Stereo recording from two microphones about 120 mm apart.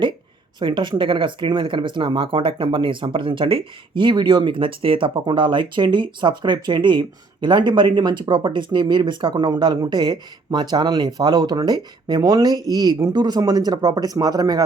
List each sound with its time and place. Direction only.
0.6 s speech: 40° right (ahead or behind)